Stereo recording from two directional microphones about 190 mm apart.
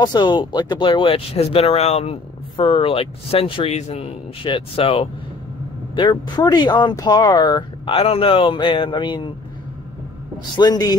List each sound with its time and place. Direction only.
0.0 s speech: 20° left (ahead or behind)
10.6 s speech: 20° left (ahead or behind)